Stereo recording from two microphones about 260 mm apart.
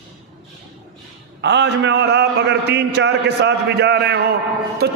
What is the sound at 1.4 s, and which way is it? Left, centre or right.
A man's voice, right.